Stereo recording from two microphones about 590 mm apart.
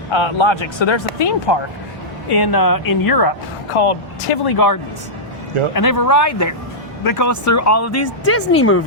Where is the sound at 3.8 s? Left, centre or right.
Left.